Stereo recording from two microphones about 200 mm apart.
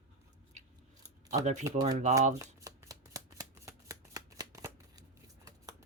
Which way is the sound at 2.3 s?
15° right (ahead or behind).